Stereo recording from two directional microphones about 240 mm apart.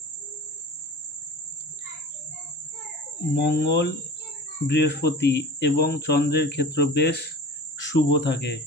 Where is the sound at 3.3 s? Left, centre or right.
Left.